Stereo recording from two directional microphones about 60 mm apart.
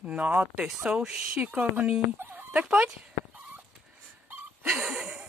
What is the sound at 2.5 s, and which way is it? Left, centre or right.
Speech, centre.